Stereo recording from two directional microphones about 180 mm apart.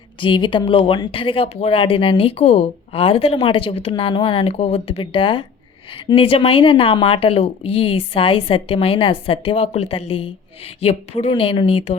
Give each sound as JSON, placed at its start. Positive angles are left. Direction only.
{"t": 0.2, "sound": "speech", "side_deg": 25}